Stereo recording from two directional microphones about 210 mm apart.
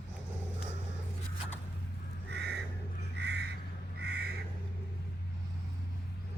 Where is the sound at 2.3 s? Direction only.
55° right (ahead or behind).